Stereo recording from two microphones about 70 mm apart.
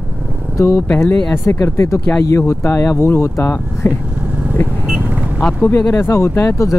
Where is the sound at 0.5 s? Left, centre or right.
Left.